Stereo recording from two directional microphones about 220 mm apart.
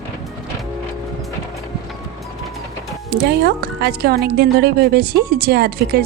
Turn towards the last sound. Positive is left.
turn(degrees=-45)  # may be behind; listen again after turning